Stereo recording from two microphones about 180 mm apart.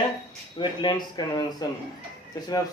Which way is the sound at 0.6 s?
25° left (ahead or behind).